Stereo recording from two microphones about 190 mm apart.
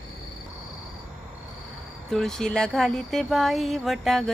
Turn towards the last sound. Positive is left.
turn(degrees=0)  # may be behind; listen again after turning